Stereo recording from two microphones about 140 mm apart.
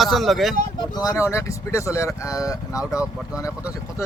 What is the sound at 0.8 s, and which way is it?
Speech, 30° left (ahead or behind).